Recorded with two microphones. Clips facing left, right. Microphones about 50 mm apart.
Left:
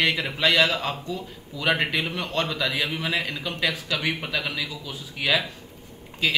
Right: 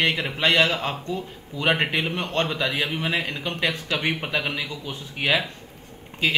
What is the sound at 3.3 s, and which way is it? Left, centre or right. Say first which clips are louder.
Speech: right 1 dB; right.